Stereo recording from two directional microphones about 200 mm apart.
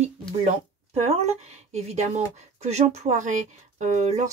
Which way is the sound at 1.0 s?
35° right (ahead or behind).